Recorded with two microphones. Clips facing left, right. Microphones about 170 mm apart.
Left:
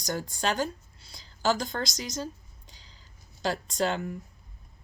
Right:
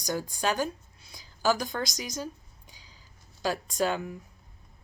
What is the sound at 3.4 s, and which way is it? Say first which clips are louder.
Speech: even; 10° right (ahead or behind).